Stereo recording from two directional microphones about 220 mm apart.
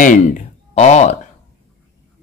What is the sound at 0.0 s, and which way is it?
Speech, 35° left (ahead or behind).